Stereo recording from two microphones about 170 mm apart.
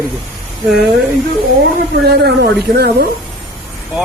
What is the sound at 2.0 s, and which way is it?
Speech, 70° right (ahead or behind).